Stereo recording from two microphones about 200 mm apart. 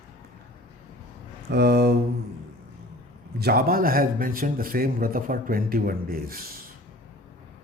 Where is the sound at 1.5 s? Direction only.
55° right (ahead or behind).